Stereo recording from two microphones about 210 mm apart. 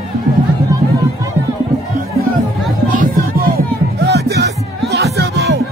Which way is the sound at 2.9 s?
45° right (ahead or behind).